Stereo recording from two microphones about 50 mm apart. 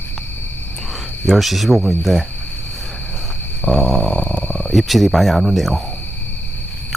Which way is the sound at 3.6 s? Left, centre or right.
Centre.